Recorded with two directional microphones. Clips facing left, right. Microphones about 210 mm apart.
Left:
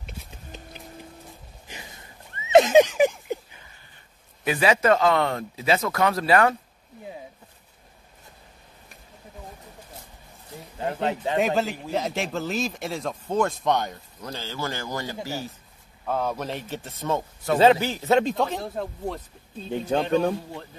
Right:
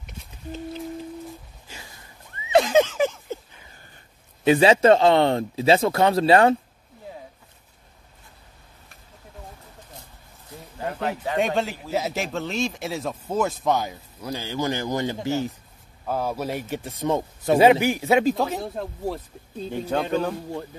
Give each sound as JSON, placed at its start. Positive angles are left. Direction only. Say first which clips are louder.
{"t": 1.7, "sound": "a sound", "louder": "left 1 dB", "side_deg": 15}
{"t": 4.5, "sound": "speech", "louder": "right 5 dB", "side_deg": -25}
{"t": 10.8, "sound": "a sound", "louder": "left 1 dB", "side_deg": 25}
{"t": 11.3, "sound": "speech", "louder": "even", "side_deg": 0}
{"t": 16.1, "sound": "a man's voice", "louder": "right 1 dB", "side_deg": -10}
{"t": 19.9, "sound": "a man's voice", "louder": "left 1 dB", "side_deg": 15}